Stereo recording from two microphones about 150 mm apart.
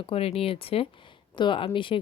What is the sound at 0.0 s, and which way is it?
A woman's voice, 40° left (ahead or behind).